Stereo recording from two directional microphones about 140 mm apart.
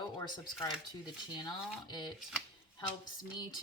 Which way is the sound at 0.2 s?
25° left (ahead or behind).